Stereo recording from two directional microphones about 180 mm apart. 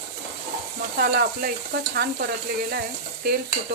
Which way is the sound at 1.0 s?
55° right (ahead or behind).